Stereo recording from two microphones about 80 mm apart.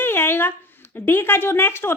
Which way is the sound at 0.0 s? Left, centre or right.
Left.